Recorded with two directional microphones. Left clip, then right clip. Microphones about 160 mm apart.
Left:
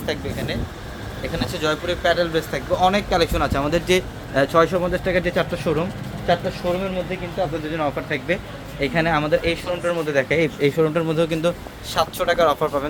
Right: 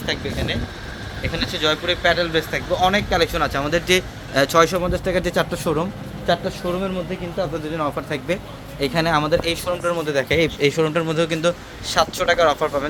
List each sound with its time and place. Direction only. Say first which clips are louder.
0.0 s speech: right 1 dB; centre (ahead or behind)
4.4 s speech: right 1 dB; 10° right (ahead or behind)
5.1 s speech: even; 25° right (ahead or behind)
7.7 s speech: even; 15° right (ahead or behind); by 9.6 s 30° right (ahead or behind)
9.8 s speech: left 2 dB; 20° right (ahead or behind); by 12.9 s centre (ahead or behind)